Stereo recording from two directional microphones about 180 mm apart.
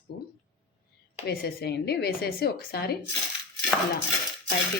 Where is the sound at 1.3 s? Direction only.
60° left (ahead or behind).